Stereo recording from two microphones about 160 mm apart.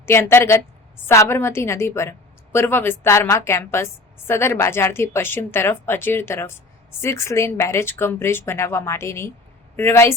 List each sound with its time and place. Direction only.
0.0 s a woman's voice: 15° left (ahead or behind)